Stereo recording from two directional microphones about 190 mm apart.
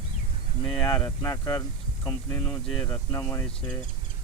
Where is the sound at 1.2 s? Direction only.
20° left (ahead or behind).